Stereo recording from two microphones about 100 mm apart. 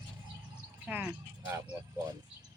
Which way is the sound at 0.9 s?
15° right (ahead or behind).